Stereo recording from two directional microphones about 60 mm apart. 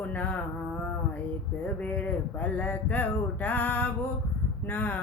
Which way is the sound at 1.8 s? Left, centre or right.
Left.